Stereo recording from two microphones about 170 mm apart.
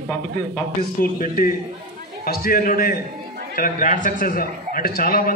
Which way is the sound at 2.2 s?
60° left (ahead or behind).